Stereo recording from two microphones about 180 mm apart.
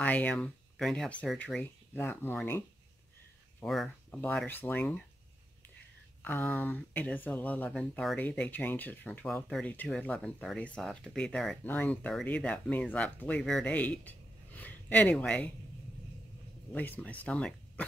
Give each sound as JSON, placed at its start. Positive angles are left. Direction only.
{"t": 0.0, "sound": "speech", "side_deg": 10}
{"t": 3.6, "sound": "speech", "side_deg": 0}
{"t": 6.2, "sound": "speech", "side_deg": 10}
{"t": 16.7, "sound": "speech", "side_deg": 10}